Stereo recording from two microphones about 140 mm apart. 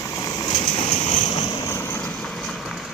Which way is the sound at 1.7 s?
15° left (ahead or behind).